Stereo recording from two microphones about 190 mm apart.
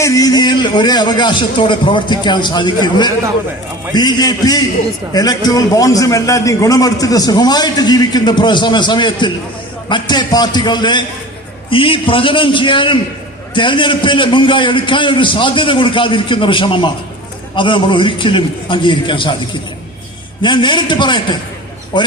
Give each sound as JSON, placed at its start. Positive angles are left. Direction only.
{"t": 0.0, "sound": "a man's voice", "side_deg": 20}
{"t": 20.4, "sound": "a man's voice", "side_deg": 25}